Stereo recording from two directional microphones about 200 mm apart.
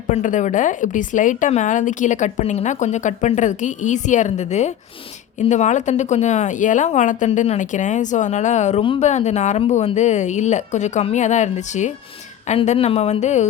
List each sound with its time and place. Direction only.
0.1 s speech: 40° left (ahead or behind)